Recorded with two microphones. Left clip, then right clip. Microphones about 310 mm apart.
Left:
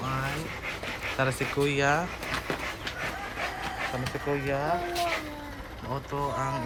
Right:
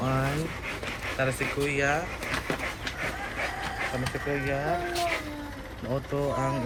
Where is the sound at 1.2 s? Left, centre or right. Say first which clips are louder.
Even; left.